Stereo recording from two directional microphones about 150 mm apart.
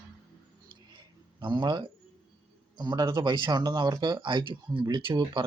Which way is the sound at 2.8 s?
30° right (ahead or behind).